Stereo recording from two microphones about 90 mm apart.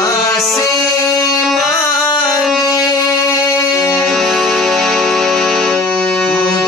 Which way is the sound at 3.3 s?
40° left (ahead or behind).